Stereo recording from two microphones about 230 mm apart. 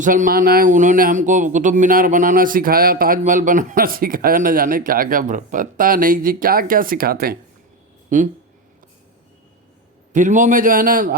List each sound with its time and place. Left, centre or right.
0.0 s speech: right
10.1 s speech: right